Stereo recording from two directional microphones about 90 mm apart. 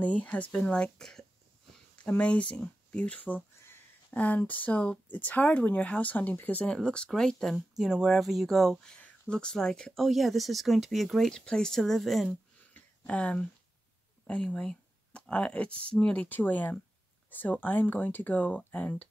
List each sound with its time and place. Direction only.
0.0 s speech: 15° left (ahead or behind); by 12.4 s centre (ahead or behind)
12.7 s a sound: 15° left (ahead or behind)
14.2 s speech: 10° left (ahead or behind)